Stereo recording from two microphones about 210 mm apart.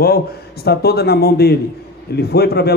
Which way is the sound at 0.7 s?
50° left (ahead or behind).